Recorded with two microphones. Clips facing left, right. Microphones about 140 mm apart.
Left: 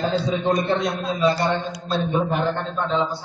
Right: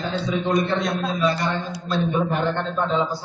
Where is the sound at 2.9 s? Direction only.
5° right (ahead or behind).